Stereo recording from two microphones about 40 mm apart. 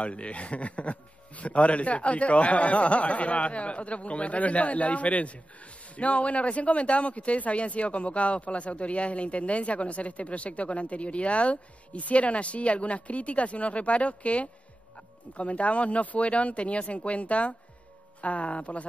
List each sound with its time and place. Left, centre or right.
0.0 s a man's voice: left